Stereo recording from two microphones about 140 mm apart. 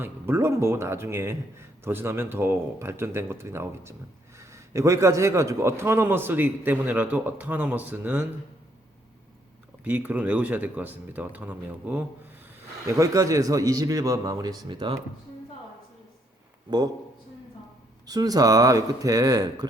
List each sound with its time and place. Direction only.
0.0 s a man's voice: 15° right (ahead or behind)
9.8 s a man's voice: 10° right (ahead or behind)
12.8 s speech: 25° right (ahead or behind)
14.8 s speech: 40° right (ahead or behind)
16.6 s speech: 30° right (ahead or behind)
18.0 s speech: 30° right (ahead or behind)